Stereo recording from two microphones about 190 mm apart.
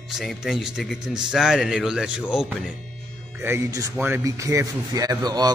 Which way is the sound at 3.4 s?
15° right (ahead or behind).